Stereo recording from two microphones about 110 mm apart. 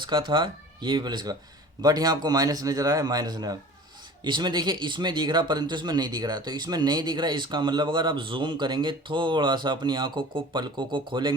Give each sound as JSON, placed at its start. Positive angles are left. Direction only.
{"t": 0.0, "sound": "a man's voice", "side_deg": -45}